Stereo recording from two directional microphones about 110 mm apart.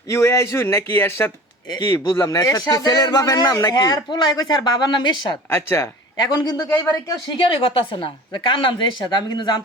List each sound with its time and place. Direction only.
0.1 s speech: 25° left (ahead or behind)
1.8 s speech: 40° left (ahead or behind)
5.5 s speech: 25° left (ahead or behind)
6.1 s speech: 40° left (ahead or behind)
7.1 s a woman's voice: 50° left (ahead or behind)